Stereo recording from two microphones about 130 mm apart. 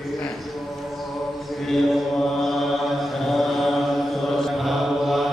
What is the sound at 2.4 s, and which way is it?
Chant, centre (ahead or behind).